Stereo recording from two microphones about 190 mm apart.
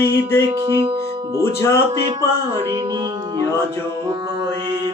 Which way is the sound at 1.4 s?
15° left (ahead or behind).